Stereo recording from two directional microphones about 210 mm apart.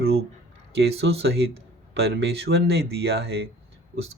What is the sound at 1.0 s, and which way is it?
Speech, 55° right (ahead or behind).